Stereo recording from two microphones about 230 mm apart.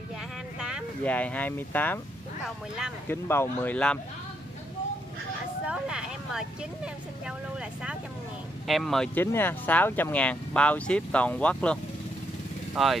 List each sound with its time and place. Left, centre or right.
0.6 s speech: centre
3.1 s speech: centre
5.7 s speech: centre
8.6 s speech: centre